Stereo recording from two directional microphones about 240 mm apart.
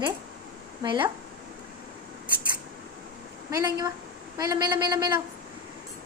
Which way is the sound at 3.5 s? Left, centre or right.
Centre.